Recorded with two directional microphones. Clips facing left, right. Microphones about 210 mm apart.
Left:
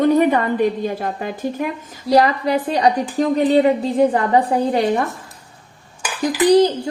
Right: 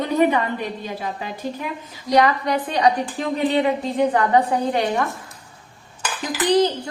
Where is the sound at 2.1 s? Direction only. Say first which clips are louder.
Left 3 dB; 35° left (ahead or behind).